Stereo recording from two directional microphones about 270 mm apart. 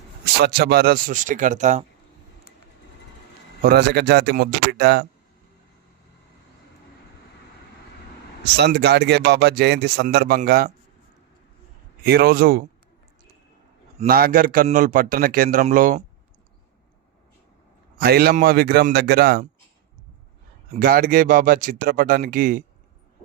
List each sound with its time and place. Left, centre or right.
0.3 s speech: right
3.6 s speech: right
8.5 s speech: right
12.0 s speech: right
14.0 s speech: right
17.9 s speech: right
20.7 s speech: right